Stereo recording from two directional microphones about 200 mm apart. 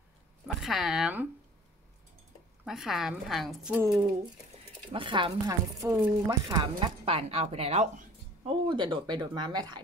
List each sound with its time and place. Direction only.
0.6 s a woman's voice: centre (ahead or behind)
2.6 s a woman's voice: centre (ahead or behind)
3.8 s speech: 20° right (ahead or behind)